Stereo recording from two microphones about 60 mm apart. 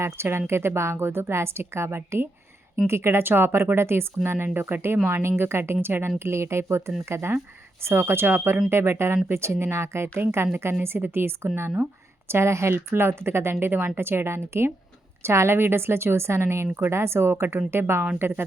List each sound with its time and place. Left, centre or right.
0.0 s speech: right